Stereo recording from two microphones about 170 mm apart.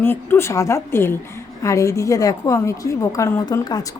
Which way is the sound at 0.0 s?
15° left (ahead or behind).